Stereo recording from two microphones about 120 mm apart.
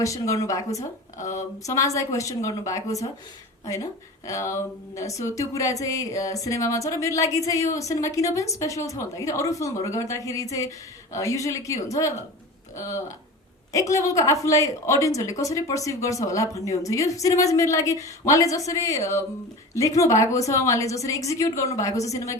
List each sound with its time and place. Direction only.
0.0 s speech: 25° left (ahead or behind)
4.3 s speech: 25° left (ahead or behind)